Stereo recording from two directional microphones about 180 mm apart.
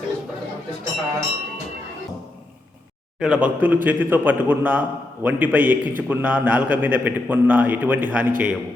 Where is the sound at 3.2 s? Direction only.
5° right (ahead or behind).